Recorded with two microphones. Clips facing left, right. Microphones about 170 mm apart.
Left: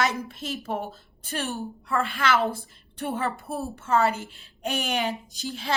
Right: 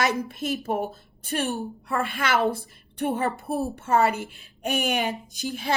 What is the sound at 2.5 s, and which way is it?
A woman's voice, 20° right (ahead or behind).